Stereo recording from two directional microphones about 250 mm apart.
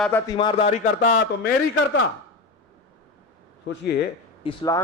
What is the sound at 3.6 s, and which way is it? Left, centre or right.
Speech, left.